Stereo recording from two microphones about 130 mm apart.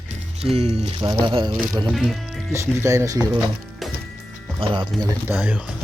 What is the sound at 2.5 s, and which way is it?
Speech, 20° right (ahead or behind).